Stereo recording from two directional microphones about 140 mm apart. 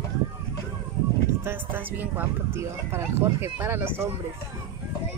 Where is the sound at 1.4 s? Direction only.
15° right (ahead or behind).